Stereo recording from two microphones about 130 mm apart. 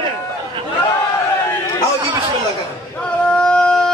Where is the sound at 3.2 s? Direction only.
5° left (ahead or behind).